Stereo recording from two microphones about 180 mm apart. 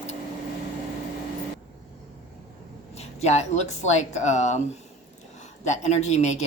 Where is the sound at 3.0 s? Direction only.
40° left (ahead or behind).